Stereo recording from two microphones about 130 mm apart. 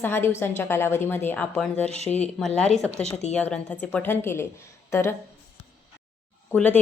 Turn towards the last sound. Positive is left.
turn(degrees=15)  # may be behind; listen again after turning